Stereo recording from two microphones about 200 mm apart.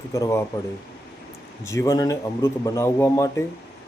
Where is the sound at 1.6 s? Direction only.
15° left (ahead or behind).